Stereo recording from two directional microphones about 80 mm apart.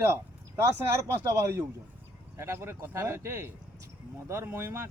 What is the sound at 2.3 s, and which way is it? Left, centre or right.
Speech, right.